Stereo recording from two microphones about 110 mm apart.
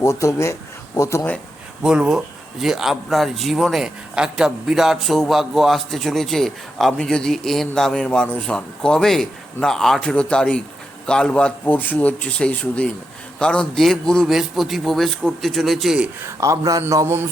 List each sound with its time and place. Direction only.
0.0 s speech: 30° left (ahead or behind)
1.8 s a man's voice: 5° right (ahead or behind)
16.2 s a man's voice: 30° right (ahead or behind)